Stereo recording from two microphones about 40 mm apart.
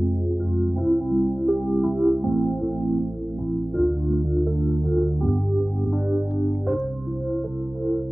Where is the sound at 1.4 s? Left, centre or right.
Centre.